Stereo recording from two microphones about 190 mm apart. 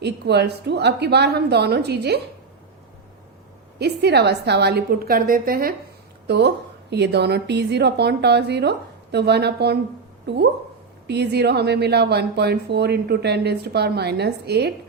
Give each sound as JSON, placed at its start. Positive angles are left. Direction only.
{"t": 0.0, "sound": "a woman's voice", "side_deg": -60}
{"t": 3.8, "sound": "a woman's voice", "side_deg": -60}
{"t": 6.2, "sound": "a woman's voice", "side_deg": -65}